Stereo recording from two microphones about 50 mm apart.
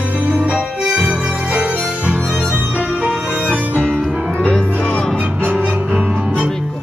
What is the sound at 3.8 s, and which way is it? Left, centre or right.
Music, centre.